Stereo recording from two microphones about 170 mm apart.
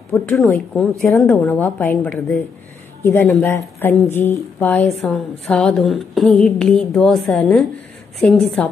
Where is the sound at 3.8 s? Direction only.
10° left (ahead or behind).